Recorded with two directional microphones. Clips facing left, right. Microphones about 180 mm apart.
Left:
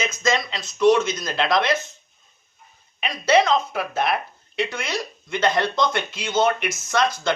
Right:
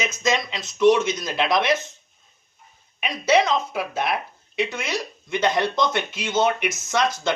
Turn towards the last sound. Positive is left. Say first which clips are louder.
# left 1 dB
turn(degrees=-20)  # may be behind; listen again after turning